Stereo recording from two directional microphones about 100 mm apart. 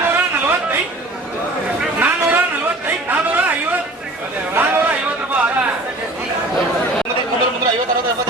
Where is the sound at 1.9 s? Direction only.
20° right (ahead or behind).